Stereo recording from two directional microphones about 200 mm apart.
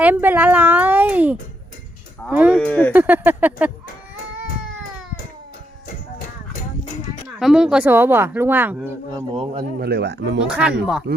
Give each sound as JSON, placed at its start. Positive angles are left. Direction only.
{"t": 0.0, "sound": "speech", "side_deg": -10}
{"t": 2.6, "sound": "speech", "side_deg": 5}
{"t": 2.9, "sound": "speech", "side_deg": -10}
{"t": 7.3, "sound": "speech", "side_deg": -5}
{"t": 9.1, "sound": "speech", "side_deg": -25}
{"t": 9.8, "sound": "speech", "side_deg": -55}
{"t": 10.4, "sound": "speech", "side_deg": -5}